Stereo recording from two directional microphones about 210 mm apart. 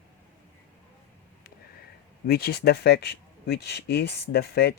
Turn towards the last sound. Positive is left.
turn(degrees=50)  # may be behind; listen again after turning